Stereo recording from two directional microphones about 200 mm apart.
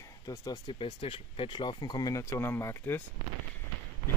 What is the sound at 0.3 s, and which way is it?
Speech, 15° left (ahead or behind).